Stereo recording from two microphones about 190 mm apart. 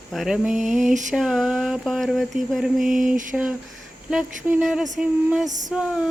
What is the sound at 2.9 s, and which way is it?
Mantra, 45° right (ahead or behind).